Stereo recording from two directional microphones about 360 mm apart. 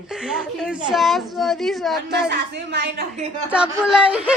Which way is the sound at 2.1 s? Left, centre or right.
Right.